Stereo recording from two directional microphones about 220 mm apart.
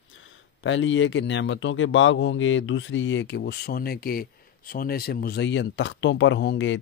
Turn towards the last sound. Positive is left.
turn(degrees=55)  # may be behind; listen again after turning